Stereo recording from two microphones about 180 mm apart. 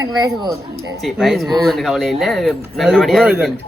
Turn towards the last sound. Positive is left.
turn(degrees=-5)  # may be behind; listen again after turning